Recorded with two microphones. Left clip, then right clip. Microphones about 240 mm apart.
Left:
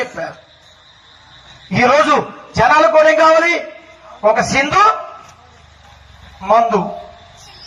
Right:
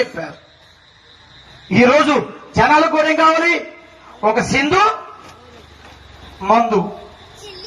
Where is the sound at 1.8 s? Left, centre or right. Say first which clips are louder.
Left 2 dB; centre.